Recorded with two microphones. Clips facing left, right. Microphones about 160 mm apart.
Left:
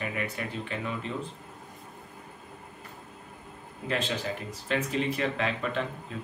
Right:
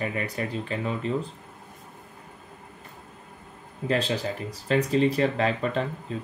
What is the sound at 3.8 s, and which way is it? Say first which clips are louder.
Speech: right 5 dB; 35° right (ahead or behind).